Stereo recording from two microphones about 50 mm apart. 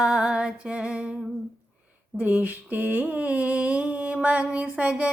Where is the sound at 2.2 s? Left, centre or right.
Right.